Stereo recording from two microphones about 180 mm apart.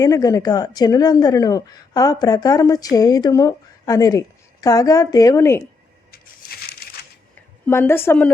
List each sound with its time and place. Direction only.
0.0 s a woman's voice: 20° left (ahead or behind)
6.1 s crushing: 55° left (ahead or behind)
7.7 s a woman's voice: 15° left (ahead or behind)